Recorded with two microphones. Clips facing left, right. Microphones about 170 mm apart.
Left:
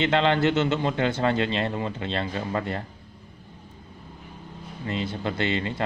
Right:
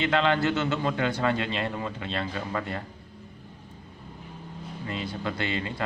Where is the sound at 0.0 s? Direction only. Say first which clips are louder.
Left 3 dB; 25° left (ahead or behind).